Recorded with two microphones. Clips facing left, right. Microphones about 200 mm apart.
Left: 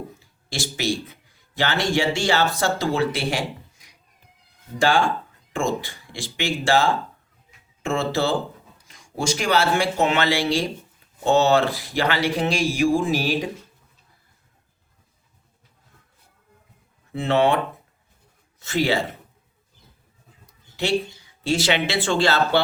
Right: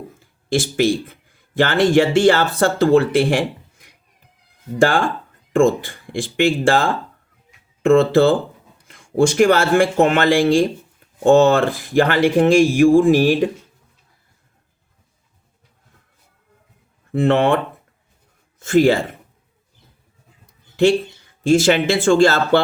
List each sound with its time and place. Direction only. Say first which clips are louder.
0.2 s speech: right 11 dB; 55° right (ahead or behind)
17.1 s speech: right 4 dB; 55° right (ahead or behind)
18.6 s speech: right 8 dB; 50° right (ahead or behind)
20.5 s a sound: right 13 dB; 50° right (ahead or behind)
21.4 s speech: right 8 dB; 50° right (ahead or behind)